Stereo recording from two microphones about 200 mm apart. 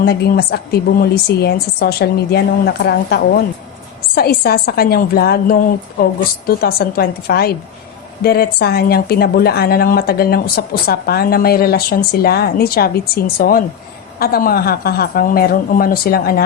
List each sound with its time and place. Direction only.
0.0 s a woman's voice: 50° left (ahead or behind)